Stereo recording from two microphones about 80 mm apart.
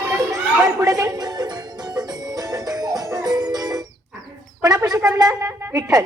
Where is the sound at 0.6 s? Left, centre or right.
Right.